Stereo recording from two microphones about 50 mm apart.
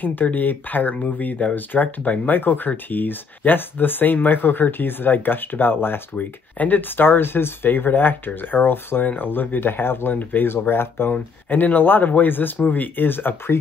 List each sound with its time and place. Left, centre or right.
0.0 s speech: left
6.1 s speech: left
11.1 s speech: left